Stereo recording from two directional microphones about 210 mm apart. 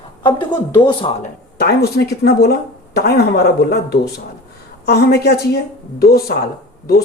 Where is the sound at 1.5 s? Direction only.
50° left (ahead or behind).